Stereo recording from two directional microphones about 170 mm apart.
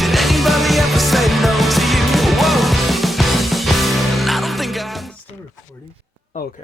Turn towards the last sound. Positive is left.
turn(degrees=55)  # may be behind; listen again after turning